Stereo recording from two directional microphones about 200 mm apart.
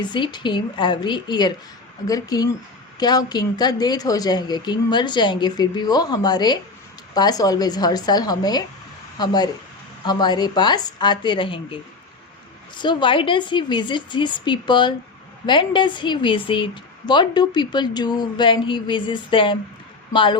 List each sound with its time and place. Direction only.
0.0 s a woman's voice: 20° left (ahead or behind)